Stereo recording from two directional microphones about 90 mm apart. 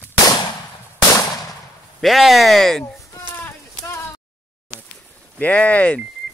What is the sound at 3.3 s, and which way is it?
Clip-clop, 20° left (ahead or behind).